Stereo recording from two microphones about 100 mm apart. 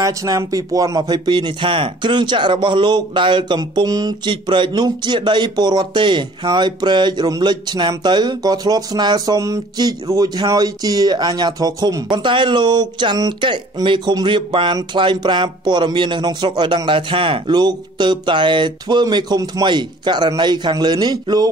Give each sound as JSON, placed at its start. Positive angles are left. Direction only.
{"t": 0.0, "sound": "speech", "side_deg": -35}